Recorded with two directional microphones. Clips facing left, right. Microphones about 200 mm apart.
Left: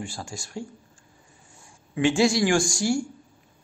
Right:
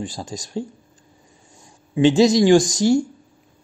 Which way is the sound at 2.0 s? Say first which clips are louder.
Right 7 dB; 20° right (ahead or behind).